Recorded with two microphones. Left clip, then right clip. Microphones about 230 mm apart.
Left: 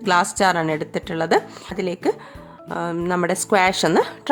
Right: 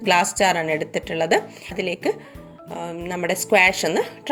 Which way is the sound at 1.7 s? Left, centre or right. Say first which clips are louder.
Left 1 dB; centre.